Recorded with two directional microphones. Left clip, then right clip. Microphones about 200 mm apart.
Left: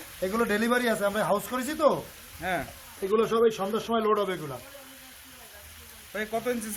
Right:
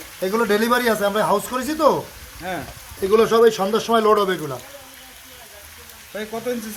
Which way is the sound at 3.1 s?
25° right (ahead or behind).